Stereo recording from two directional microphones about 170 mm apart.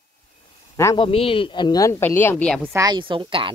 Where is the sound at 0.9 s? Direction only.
35° left (ahead or behind); by 2.7 s 5° left (ahead or behind).